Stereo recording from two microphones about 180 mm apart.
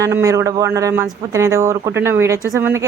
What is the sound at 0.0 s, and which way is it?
Speech, 15° right (ahead or behind).